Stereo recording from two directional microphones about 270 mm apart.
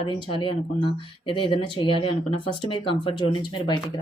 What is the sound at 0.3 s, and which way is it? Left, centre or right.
Speech, centre.